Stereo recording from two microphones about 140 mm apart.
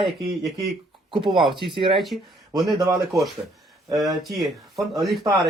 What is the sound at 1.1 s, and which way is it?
Speech, 40° right (ahead or behind).